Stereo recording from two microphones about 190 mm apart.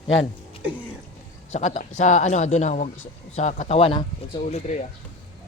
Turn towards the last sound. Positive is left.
turn(degrees=40)  # may be behind; listen again after turning